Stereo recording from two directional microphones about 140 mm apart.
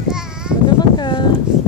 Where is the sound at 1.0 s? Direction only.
30° left (ahead or behind).